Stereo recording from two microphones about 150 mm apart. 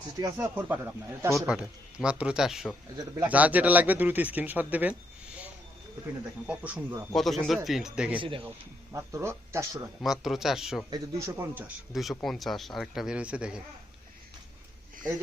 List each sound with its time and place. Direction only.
0.2 s speech: 20° right (ahead or behind)
1.3 s speech: centre (ahead or behind)
6.4 s speech: 10° right (ahead or behind)
7.1 s speech: centre (ahead or behind)
8.2 s a man's voice: 35° right (ahead or behind)
8.4 s speech: 20° right (ahead or behind)
9.7 s speech: centre (ahead or behind)
10.9 s speech: 15° right (ahead or behind)
11.9 s speech: centre (ahead or behind)